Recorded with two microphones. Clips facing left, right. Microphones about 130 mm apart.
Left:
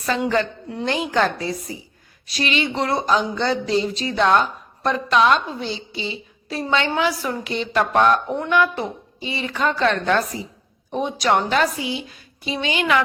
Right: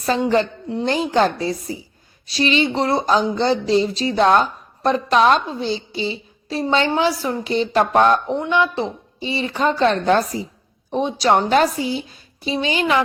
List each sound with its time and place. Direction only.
0.0 s speech: 30° right (ahead or behind)